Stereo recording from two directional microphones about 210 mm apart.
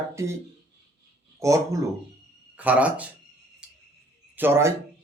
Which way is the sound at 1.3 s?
15° right (ahead or behind).